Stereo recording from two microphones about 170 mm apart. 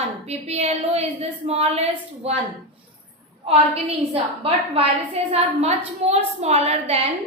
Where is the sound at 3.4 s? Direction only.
35° right (ahead or behind).